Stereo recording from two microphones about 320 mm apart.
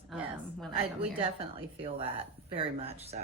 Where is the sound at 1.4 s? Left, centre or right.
Centre.